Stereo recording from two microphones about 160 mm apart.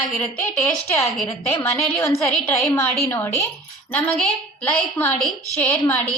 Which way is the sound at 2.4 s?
15° left (ahead or behind).